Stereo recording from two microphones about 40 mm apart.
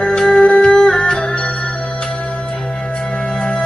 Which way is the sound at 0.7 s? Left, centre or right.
Centre.